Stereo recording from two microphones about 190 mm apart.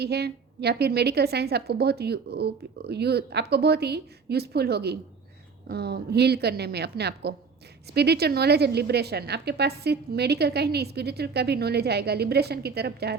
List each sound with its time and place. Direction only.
0.0 s a woman's voice: 60° right (ahead or behind)